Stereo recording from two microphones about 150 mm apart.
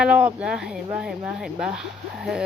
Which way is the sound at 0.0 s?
10° right (ahead or behind).